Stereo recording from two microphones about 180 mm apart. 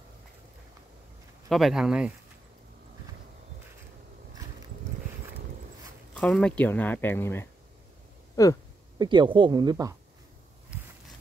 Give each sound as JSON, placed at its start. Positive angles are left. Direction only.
{"t": 1.5, "sound": "speech", "side_deg": 0}
{"t": 6.1, "sound": "speech", "side_deg": 5}
{"t": 8.4, "sound": "a sound", "side_deg": 20}
{"t": 8.9, "sound": "speech", "side_deg": -25}